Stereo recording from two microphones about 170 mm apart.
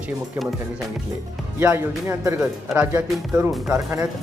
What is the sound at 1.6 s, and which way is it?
Speech, 15° right (ahead or behind).